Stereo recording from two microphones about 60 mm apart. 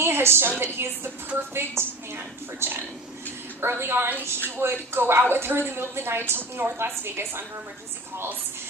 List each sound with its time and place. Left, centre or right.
0.0 s a woman's voice: right